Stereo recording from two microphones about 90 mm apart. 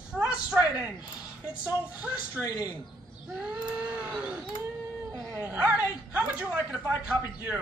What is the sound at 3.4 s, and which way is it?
Speech, 15° right (ahead or behind).